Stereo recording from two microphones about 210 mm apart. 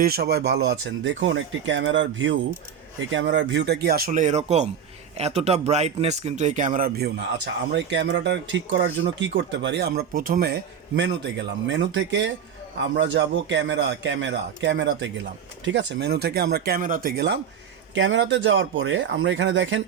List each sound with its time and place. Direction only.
0.0 s a man's voice: 50° right (ahead or behind)
10.9 s speech: 55° right (ahead or behind)